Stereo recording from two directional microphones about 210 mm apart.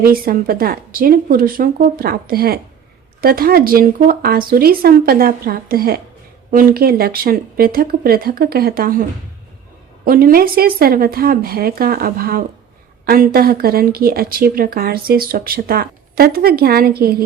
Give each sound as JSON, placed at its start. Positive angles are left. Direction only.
{"t": 0.0, "sound": "speech", "side_deg": -45}